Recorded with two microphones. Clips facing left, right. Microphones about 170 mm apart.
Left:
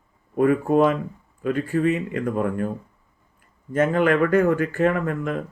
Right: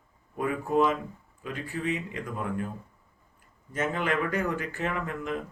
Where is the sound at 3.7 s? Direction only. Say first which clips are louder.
Left 9 dB; 55° left (ahead or behind).